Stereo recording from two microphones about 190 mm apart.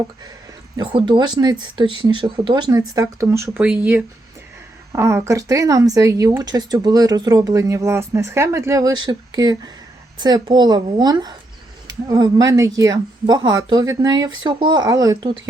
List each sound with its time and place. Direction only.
0.8 s speech: 25° right (ahead or behind)